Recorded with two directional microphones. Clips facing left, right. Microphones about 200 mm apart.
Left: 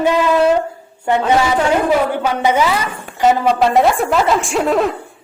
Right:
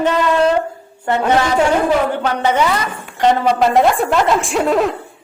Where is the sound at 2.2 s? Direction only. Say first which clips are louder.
Left 1 dB; 10° left (ahead or behind).